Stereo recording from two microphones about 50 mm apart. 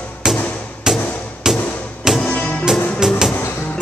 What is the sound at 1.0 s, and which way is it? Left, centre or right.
Music, left.